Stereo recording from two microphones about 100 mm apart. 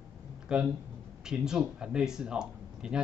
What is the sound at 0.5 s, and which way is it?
Speech, 10° right (ahead or behind).